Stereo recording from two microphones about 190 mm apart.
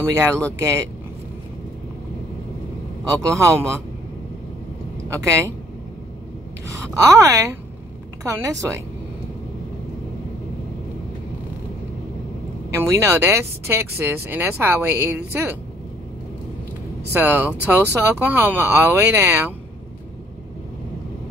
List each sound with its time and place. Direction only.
0.0 s speech: 15° right (ahead or behind)
3.1 s speech: 15° right (ahead or behind)
5.1 s speech: 15° right (ahead or behind)
6.7 s speech: 15° right (ahead or behind)
12.7 s speech: 15° right (ahead or behind)
17.1 s speech: 10° right (ahead or behind)